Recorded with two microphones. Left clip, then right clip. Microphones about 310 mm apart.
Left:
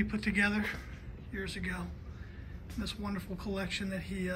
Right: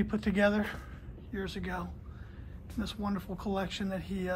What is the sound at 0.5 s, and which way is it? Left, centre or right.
Speech, centre.